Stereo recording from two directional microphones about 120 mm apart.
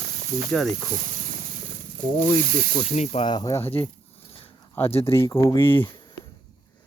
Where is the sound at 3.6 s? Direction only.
50° left (ahead or behind).